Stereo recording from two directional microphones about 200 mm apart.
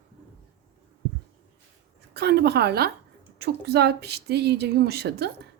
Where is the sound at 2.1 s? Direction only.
55° right (ahead or behind).